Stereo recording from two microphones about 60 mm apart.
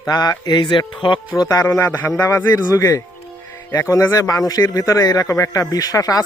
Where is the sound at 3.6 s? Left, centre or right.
Left.